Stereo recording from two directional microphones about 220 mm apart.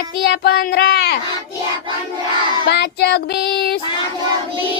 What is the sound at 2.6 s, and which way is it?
Speech, 50° left (ahead or behind).